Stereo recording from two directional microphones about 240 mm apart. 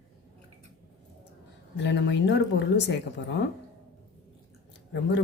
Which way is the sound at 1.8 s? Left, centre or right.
Left.